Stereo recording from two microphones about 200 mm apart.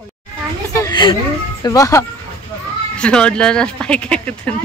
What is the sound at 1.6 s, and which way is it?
Speech, 15° left (ahead or behind).